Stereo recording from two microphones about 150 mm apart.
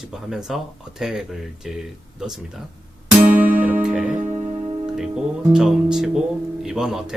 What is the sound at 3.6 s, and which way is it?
Music, 5° right (ahead or behind).